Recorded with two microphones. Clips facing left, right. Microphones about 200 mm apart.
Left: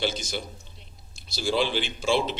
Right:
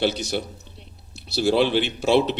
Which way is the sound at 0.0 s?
65° right (ahead or behind).